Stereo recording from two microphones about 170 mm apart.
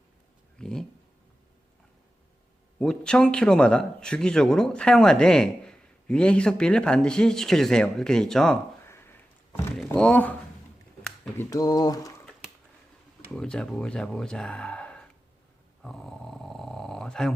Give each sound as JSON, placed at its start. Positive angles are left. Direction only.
{"t": 0.6, "sound": "a man's voice", "side_deg": 5}
{"t": 2.7, "sound": "a man's voice", "side_deg": 5}
{"t": 9.7, "sound": "a man's voice", "side_deg": 5}
{"t": 11.3, "sound": "speech", "side_deg": 20}
{"t": 13.3, "sound": "a man's voice", "side_deg": 5}
{"t": 15.8, "sound": "dog", "side_deg": 0}